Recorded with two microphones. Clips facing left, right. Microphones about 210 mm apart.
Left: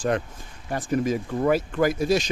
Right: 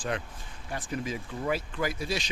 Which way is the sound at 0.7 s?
45° left (ahead or behind).